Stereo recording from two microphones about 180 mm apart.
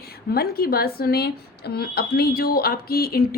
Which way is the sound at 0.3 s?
60° left (ahead or behind).